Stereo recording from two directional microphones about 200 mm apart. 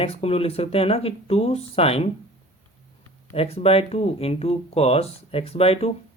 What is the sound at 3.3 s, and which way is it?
Speech, 30° left (ahead or behind).